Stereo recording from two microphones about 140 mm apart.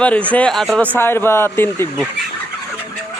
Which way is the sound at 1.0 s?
15° left (ahead or behind).